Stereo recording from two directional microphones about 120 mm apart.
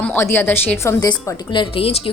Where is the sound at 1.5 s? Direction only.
50° left (ahead or behind).